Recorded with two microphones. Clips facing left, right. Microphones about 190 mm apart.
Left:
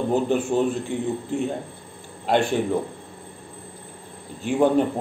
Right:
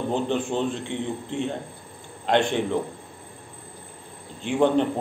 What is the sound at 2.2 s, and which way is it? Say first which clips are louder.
Speech: left 1 dB; 5° left (ahead or behind).